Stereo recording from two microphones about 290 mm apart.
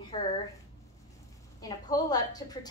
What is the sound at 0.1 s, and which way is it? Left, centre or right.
Speech, left.